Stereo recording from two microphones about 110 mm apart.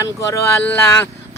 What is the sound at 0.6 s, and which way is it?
Speech, 20° left (ahead or behind).